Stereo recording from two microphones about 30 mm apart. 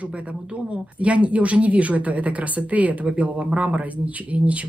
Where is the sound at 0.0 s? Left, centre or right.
Right.